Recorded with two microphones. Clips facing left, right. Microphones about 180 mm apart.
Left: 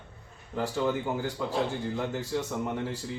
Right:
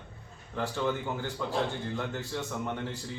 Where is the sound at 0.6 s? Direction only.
10° left (ahead or behind).